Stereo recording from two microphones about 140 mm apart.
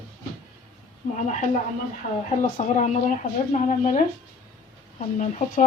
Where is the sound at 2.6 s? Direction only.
60° left (ahead or behind).